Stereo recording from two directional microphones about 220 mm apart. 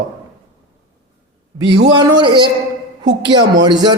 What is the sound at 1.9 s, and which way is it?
A man's voice, 20° right (ahead or behind).